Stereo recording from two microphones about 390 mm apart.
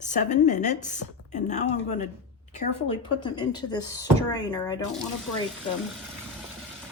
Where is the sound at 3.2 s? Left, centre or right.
Centre.